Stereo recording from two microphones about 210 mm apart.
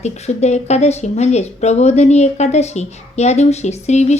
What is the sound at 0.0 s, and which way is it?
Speech, 30° left (ahead or behind).